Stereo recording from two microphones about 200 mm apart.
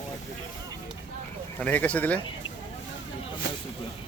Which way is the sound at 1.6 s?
5° left (ahead or behind).